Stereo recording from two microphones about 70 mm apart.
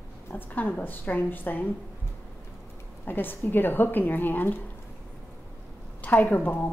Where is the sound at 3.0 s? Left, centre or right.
Left.